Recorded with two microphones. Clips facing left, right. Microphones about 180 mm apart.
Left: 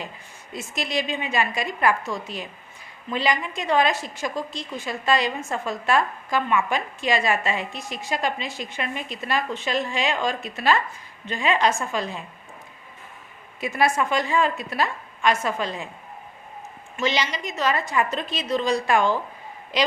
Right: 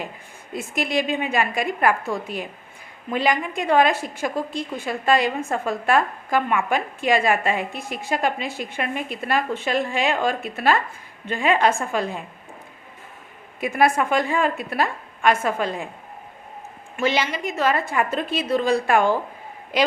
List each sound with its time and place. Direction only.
0.5 s a woman's voice: 55° right (ahead or behind)
13.6 s a woman's voice: 55° right (ahead or behind)
17.0 s a woman's voice: 55° right (ahead or behind)